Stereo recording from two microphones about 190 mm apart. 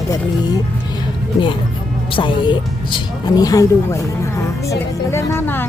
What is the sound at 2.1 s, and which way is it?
Speech, 25° left (ahead or behind).